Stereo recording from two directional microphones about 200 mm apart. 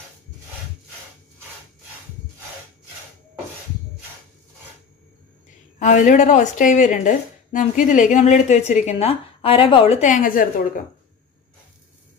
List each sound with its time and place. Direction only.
5.8 s speech: 40° left (ahead or behind)